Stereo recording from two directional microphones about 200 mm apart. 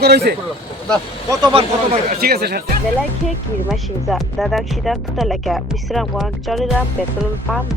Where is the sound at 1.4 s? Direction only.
25° right (ahead or behind).